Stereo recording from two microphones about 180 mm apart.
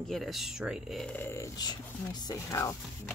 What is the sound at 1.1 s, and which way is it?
Speech, 15° left (ahead or behind).